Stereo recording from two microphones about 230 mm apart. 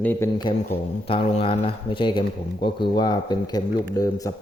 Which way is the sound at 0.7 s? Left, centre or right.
Left.